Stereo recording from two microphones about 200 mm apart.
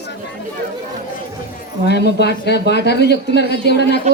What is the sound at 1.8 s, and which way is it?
Speech, 55° left (ahead or behind).